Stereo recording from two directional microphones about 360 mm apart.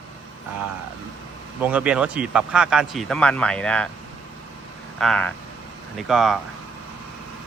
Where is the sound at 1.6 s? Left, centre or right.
Centre.